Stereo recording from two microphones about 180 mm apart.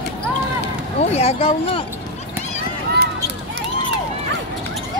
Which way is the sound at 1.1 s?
35° left (ahead or behind).